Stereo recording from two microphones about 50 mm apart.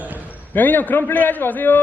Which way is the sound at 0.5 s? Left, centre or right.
Left.